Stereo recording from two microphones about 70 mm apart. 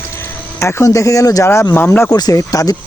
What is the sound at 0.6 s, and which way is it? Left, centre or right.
Speech, left.